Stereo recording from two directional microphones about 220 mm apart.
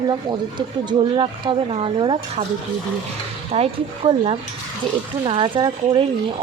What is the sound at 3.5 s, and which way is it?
A woman's voice, 25° right (ahead or behind).